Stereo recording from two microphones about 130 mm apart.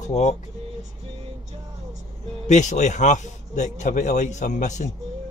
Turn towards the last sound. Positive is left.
turn(degrees=70)  # may be behind; listen again after turning